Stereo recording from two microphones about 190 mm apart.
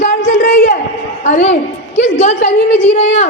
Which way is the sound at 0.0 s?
35° left (ahead or behind).